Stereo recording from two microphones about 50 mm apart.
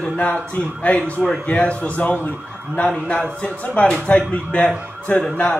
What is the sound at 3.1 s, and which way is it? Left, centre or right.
Speech, centre.